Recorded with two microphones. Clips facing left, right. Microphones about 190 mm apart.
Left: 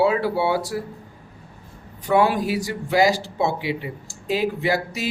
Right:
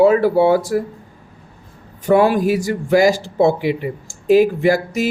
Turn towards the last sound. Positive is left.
turn(degrees=-45)  # may be behind; listen again after turning